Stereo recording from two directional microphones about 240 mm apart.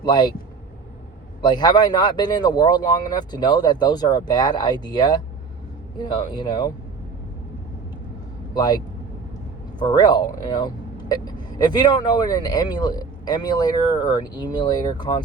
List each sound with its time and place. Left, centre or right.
0.0 s speech: centre
1.4 s speech: centre
8.5 s speech: centre